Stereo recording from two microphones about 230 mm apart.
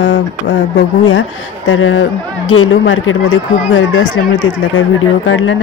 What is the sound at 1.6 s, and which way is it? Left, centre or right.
Speech, left.